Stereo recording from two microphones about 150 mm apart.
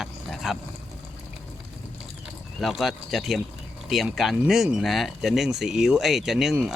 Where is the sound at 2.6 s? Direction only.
Centre (ahead or behind).